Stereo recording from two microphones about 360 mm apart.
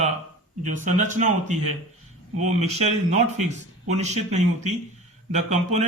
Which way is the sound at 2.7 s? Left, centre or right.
Centre.